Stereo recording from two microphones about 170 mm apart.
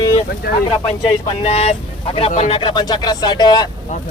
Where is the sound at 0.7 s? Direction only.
35° left (ahead or behind).